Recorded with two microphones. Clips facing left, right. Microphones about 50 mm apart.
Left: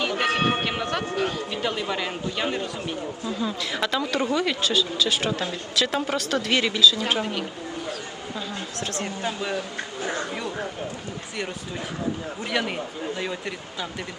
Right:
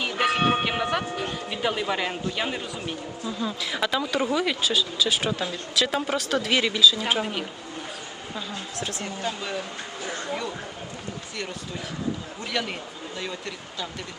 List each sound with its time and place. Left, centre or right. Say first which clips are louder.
0.0 s music: even; centre
0.6 s speech: right 1 dB; centre
9.2 s speech: left 2 dB; centre
10.0 s speech: left 5 dB; left
12.5 s speech: left 3 dB; centre